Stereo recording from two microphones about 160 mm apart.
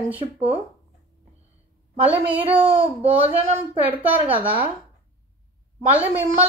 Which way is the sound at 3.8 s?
10° right (ahead or behind).